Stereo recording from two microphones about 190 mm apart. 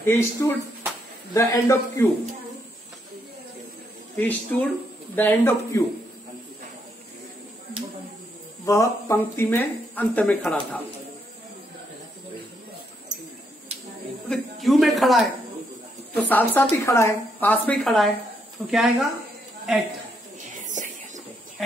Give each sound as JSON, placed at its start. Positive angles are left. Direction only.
{"t": 0.0, "sound": "speech", "side_deg": 15}
{"t": 4.2, "sound": "speech", "side_deg": 10}
{"t": 8.6, "sound": "speech", "side_deg": 15}
{"t": 14.3, "sound": "speech", "side_deg": 0}
{"t": 16.3, "sound": "a woman's voice", "side_deg": 10}
{"t": 20.6, "sound": "a sound", "side_deg": -40}